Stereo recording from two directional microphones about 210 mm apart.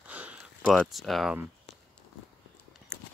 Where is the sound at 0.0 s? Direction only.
5° right (ahead or behind).